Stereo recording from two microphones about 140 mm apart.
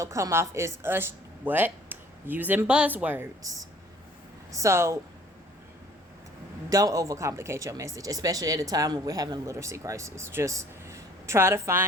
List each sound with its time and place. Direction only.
0.0 s a woman's voice: 20° right (ahead or behind)
4.5 s speech: 20° right (ahead or behind)
6.7 s speech: 25° right (ahead or behind)